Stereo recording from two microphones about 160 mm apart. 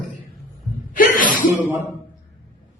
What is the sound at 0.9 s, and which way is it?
Speech, 60° left (ahead or behind).